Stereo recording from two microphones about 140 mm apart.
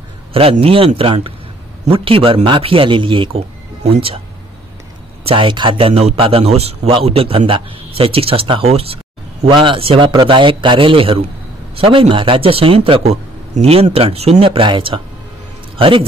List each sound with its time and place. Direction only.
0.3 s a man's voice: 40° right (ahead or behind)
5.3 s a man's voice: 35° right (ahead or behind)